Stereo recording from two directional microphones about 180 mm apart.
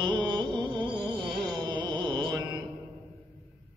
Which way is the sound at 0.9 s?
25° right (ahead or behind).